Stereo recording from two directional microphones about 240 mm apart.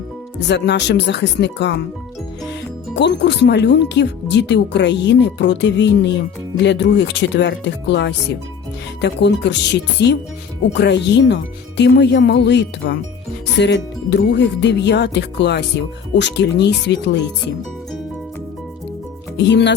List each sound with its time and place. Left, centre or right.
0.3 s speech: left
2.9 s speech: left
19.4 s speech: left